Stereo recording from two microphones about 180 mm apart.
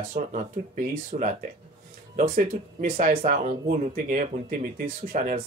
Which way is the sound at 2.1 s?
50° right (ahead or behind).